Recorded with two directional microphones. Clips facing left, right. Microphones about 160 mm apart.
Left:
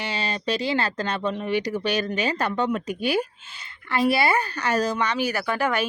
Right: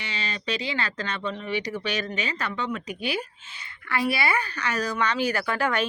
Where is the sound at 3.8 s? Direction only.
25° left (ahead or behind).